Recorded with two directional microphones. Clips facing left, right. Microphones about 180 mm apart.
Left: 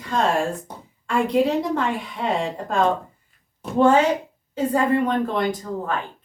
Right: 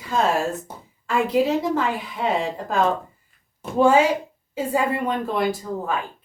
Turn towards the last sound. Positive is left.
turn(degrees=-5)  # may be behind; listen again after turning